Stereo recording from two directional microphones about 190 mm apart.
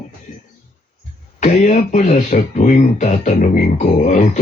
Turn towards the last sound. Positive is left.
turn(degrees=40)  # may be behind; listen again after turning